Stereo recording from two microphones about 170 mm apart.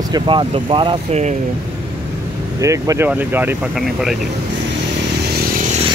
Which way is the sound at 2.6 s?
20° right (ahead or behind).